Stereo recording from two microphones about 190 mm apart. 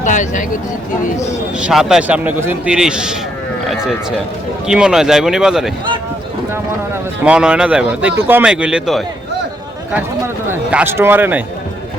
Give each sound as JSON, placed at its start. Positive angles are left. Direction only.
{"t": 0.0, "sound": "speech", "side_deg": 40}
{"t": 1.5, "sound": "a man's voice", "side_deg": -5}
{"t": 4.6, "sound": "a man's voice", "side_deg": -5}
{"t": 7.3, "sound": "a man's voice", "side_deg": -5}
{"t": 10.5, "sound": "a man's voice", "side_deg": -10}